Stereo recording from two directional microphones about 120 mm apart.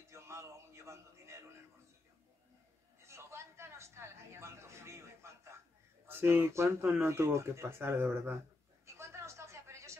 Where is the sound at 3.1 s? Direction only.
20° right (ahead or behind).